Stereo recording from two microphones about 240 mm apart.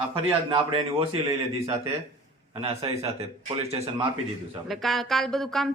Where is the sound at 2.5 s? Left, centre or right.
Right.